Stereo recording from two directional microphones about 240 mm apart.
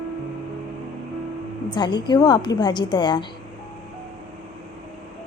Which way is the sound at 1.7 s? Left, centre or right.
Centre.